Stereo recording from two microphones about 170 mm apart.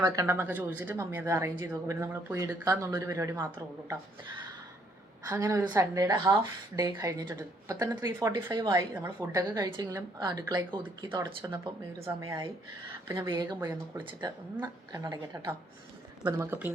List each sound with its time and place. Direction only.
0.0 s a woman's voice: 15° right (ahead or behind)
5.3 s a woman's voice: 15° right (ahead or behind)
9.0 s speech: 10° right (ahead or behind); by 11.3 s 30° right (ahead or behind)
13.1 s a woman's voice: 15° right (ahead or behind)
13.3 s speech: 25° right (ahead or behind)
13.6 s a woman's voice: 10° right (ahead or behind)
14.0 s a woman's voice: 30° right (ahead or behind); by 16.7 s 10° right (ahead or behind)